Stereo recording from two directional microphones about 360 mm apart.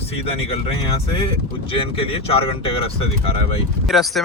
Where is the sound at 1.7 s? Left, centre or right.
Centre.